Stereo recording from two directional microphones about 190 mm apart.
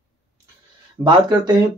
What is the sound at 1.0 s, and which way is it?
Speech, 20° right (ahead or behind).